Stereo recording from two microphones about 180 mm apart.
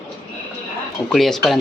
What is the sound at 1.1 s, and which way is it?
Speech, centre (ahead or behind).